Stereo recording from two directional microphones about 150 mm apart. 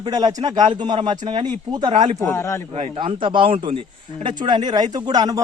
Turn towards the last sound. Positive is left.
turn(degrees=-25)  # may be behind; listen again after turning